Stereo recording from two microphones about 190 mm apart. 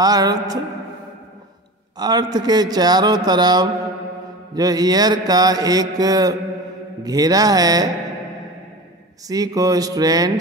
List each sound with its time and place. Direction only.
0.0 s mantra: 20° right (ahead or behind)
2.0 s mantra: 20° right (ahead or behind)
9.3 s mantra: 20° right (ahead or behind)